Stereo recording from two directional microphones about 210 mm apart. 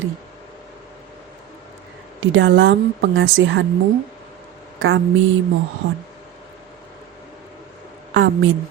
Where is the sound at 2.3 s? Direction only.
60° right (ahead or behind).